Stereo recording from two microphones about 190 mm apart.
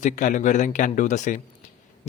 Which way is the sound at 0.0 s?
40° left (ahead or behind).